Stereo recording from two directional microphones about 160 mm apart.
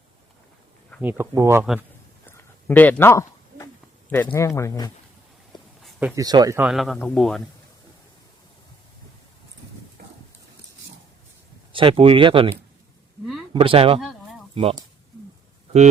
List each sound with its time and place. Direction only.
1.0 s speech: 15° right (ahead or behind)
2.6 s speech: 10° left (ahead or behind)
6.1 s speech: 25° right (ahead or behind)
6.6 s a man's voice: 5° right (ahead or behind)
10.0 s a sound: 75° right (ahead or behind)
11.7 s speech: 35° right (ahead or behind)
13.5 s speech: 35° right (ahead or behind)
14.0 s a sound: centre (ahead or behind)
14.5 s speech: 35° right (ahead or behind)